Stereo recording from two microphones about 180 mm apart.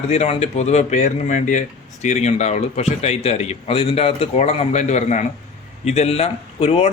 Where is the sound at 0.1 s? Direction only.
35° left (ahead or behind).